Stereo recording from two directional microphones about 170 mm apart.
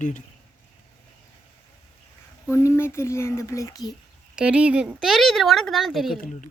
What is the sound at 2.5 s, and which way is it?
Speech, 15° left (ahead or behind).